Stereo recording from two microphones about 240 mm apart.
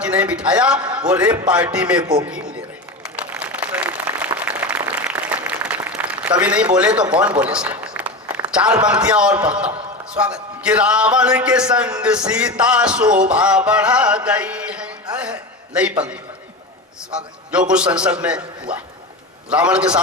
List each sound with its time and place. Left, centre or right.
0.0 s a man's voice: centre
2.0 s a man's voice: centre
3.0 s applause: centre
6.7 s a man's voice: centre
7.1 s a sound: centre
8.9 s a man's voice: centre
17.5 s a man's voice: centre
19.5 s a man's voice: centre